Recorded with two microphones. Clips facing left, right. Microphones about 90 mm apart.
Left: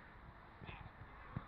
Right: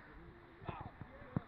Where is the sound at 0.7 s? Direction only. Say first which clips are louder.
Right 10 dB; 30° right (ahead or behind).